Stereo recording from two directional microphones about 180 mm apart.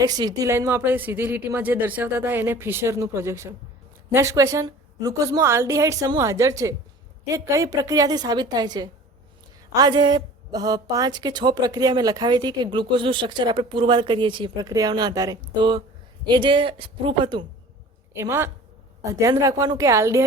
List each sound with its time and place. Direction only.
0.0 s a woman's voice: 20° right (ahead or behind)
18.1 s a woman's voice: 15° right (ahead or behind)